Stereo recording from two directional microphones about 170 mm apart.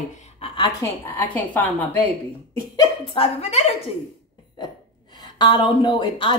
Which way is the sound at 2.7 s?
30° left (ahead or behind).